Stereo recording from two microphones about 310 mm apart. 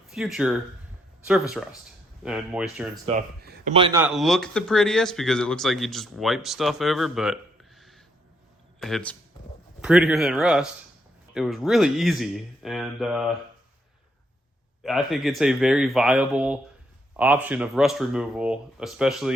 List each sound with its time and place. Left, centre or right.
0.1 s speech: centre
3.1 s a man's voice: right
4.0 s speech: centre
14.8 s speech: centre